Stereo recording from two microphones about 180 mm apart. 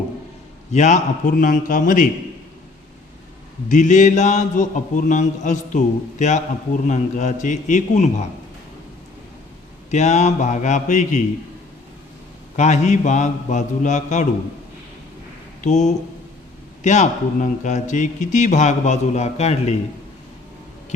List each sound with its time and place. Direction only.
0.7 s a man's voice: 40° left (ahead or behind)
3.7 s a man's voice: 45° left (ahead or behind)
9.9 s speech: 40° left (ahead or behind)
12.5 s speech: 40° left (ahead or behind)
15.6 s speech: 40° left (ahead or behind)